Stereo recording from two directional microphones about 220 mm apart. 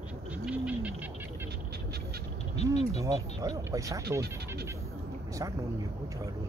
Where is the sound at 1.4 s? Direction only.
45° right (ahead or behind).